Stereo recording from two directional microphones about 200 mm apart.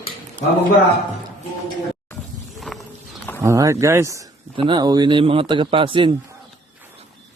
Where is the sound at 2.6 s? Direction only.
Centre (ahead or behind).